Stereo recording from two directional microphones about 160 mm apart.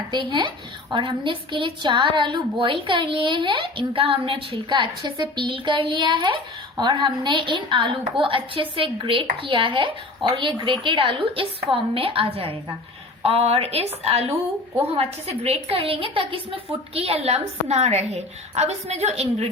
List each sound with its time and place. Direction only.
0.1 s a woman's voice: 30° right (ahead or behind)